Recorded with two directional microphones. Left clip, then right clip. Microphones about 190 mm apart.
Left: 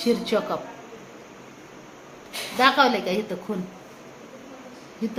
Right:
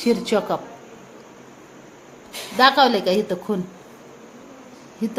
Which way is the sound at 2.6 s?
50° right (ahead or behind).